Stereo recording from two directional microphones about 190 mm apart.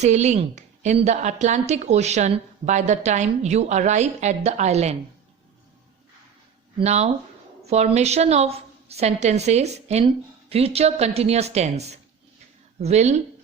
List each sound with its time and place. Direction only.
0.0 s a woman's voice: 35° right (ahead or behind)
6.7 s a woman's voice: 35° right (ahead or behind)